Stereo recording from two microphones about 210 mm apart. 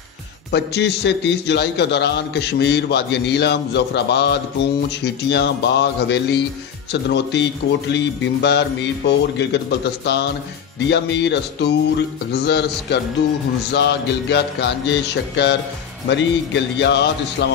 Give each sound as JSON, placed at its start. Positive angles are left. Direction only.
{"t": 0.5, "sound": "a man's voice", "side_deg": 55}